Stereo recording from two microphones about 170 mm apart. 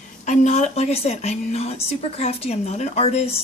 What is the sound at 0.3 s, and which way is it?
Speech, 40° left (ahead or behind).